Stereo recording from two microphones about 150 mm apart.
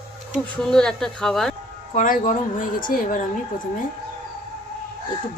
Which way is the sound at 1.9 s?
65° left (ahead or behind).